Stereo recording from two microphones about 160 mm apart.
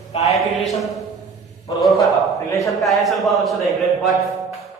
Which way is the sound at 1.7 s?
30° left (ahead or behind).